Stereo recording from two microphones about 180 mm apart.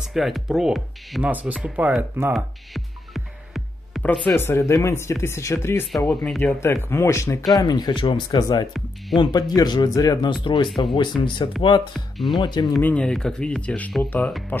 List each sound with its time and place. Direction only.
0.0 s speech: centre (ahead or behind)
2.3 s music: centre (ahead or behind)
5.9 s speech: centre (ahead or behind); by 11.5 s 25° left (ahead or behind)
11.9 s speech: centre (ahead or behind)
12.4 s speech: 25° left (ahead or behind)
12.7 s speech: 5° left (ahead or behind)